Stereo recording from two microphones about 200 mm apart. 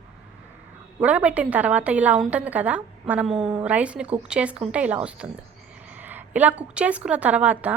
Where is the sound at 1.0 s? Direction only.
5° right (ahead or behind).